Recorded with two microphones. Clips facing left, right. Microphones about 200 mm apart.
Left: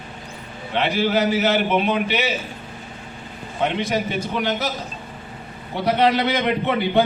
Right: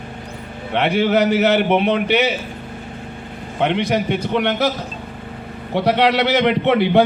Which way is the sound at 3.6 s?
65° right (ahead or behind).